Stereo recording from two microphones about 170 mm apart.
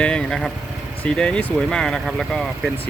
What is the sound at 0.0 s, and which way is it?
Speech, 5° left (ahead or behind).